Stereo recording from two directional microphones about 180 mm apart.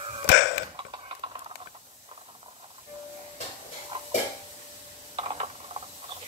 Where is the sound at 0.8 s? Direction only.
30° right (ahead or behind).